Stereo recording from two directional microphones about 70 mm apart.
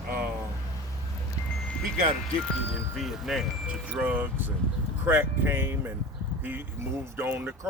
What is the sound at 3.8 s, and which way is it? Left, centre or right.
Speech, right.